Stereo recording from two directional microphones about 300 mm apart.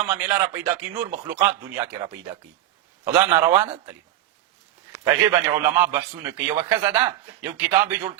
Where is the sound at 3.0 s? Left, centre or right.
Centre.